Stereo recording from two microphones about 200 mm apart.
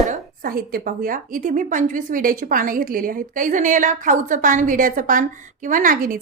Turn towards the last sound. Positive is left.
turn(degrees=-45)  # may be behind; listen again after turning